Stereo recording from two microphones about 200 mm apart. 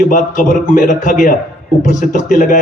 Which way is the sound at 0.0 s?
40° left (ahead or behind).